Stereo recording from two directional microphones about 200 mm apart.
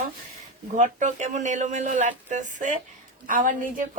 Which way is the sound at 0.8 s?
35° right (ahead or behind).